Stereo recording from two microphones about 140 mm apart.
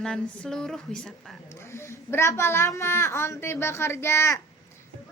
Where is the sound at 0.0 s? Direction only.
5° left (ahead or behind).